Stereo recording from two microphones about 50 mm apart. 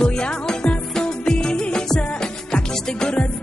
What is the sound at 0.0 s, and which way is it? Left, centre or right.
Music, centre.